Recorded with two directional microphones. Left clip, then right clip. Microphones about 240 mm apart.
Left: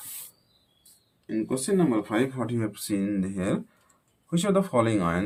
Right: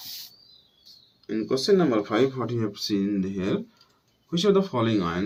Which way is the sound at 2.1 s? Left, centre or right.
Left.